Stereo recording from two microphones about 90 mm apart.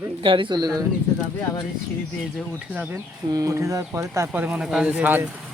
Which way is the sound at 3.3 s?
40° right (ahead or behind).